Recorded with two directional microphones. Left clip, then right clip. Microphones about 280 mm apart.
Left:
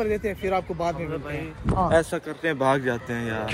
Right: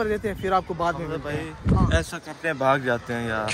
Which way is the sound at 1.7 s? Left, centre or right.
Centre.